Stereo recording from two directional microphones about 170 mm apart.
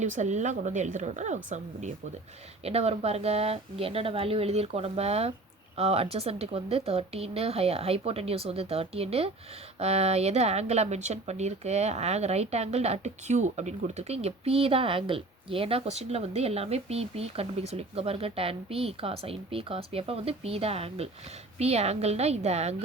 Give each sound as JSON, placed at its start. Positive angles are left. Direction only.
{"t": 0.0, "sound": "a woman's voice", "side_deg": -45}